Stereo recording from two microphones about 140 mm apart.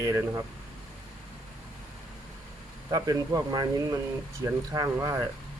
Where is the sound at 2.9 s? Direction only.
25° right (ahead or behind).